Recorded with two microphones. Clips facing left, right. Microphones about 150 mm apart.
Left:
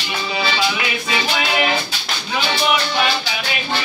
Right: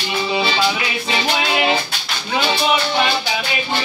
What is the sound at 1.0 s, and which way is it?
Music, 30° right (ahead or behind).